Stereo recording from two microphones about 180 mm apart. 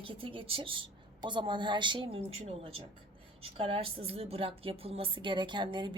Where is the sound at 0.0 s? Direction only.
30° right (ahead or behind).